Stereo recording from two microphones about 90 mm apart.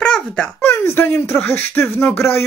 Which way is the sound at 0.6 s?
20° left (ahead or behind).